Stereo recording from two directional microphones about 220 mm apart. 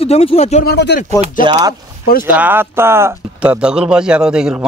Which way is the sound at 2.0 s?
40° left (ahead or behind).